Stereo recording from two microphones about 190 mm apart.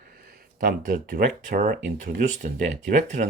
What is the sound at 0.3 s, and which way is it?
Speech, 50° right (ahead or behind).